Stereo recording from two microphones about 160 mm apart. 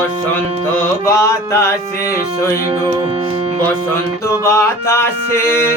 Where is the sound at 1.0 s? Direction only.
20° left (ahead or behind).